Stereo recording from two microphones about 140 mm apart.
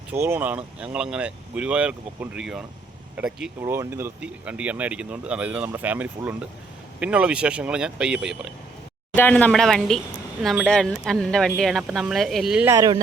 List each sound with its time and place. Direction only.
0.1 s speech: 15° right (ahead or behind)
3.6 s speech: 20° right (ahead or behind)
9.1 s speech: 10° left (ahead or behind)
12.6 s speech: 25° right (ahead or behind)